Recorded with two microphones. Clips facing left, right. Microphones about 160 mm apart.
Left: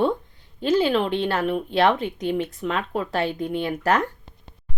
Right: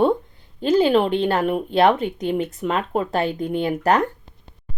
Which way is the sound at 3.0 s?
20° right (ahead or behind).